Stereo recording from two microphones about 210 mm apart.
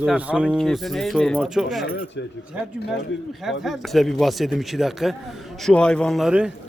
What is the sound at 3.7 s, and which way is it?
Speech, centre (ahead or behind).